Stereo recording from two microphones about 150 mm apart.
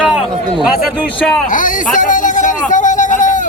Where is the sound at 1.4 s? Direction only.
60° left (ahead or behind).